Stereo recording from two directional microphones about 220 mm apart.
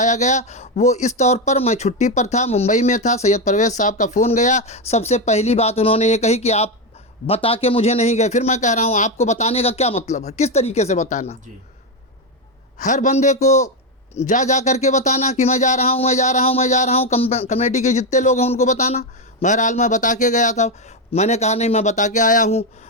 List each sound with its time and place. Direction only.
0.0 s a man's voice: 35° left (ahead or behind)
12.8 s speech: 35° left (ahead or behind)